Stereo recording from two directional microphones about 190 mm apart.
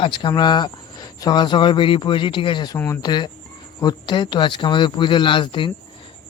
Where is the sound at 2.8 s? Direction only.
10° left (ahead or behind).